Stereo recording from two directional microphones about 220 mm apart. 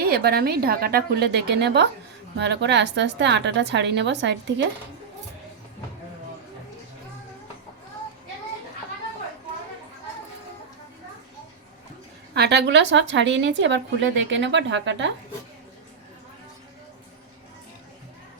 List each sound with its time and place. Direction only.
0.0 s a woman's voice: 45° right (ahead or behind)
12.3 s a woman's voice: 50° right (ahead or behind)